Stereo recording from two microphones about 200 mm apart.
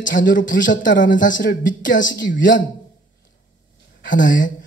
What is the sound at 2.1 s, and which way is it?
Speech, 65° left (ahead or behind).